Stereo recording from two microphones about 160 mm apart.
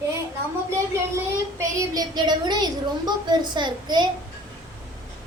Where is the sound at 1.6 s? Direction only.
20° right (ahead or behind).